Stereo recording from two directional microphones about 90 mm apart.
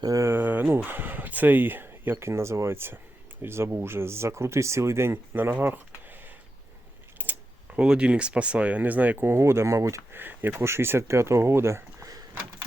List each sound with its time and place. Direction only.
0.0 s a sound: 40° right (ahead or behind)
0.3 s speech: 20° right (ahead or behind)
10.2 s speech: 20° right (ahead or behind)